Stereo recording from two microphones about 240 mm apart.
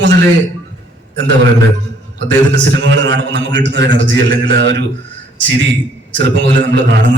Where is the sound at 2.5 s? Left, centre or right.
Right.